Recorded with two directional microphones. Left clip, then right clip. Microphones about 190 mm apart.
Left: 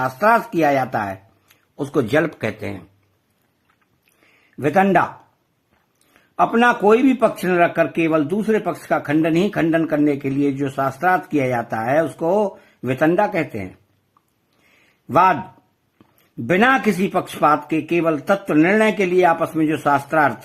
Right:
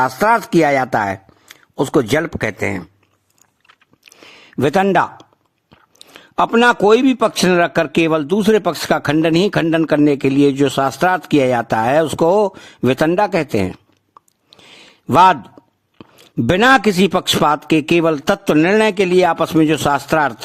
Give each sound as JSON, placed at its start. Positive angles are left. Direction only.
{"t": 0.0, "sound": "speech", "side_deg": -40}
{"t": 4.2, "sound": "a sound", "side_deg": -50}
{"t": 6.1, "sound": "a man's voice", "side_deg": -45}
{"t": 15.1, "sound": "a man's voice", "side_deg": -45}
{"t": 16.5, "sound": "a man's voice", "side_deg": -45}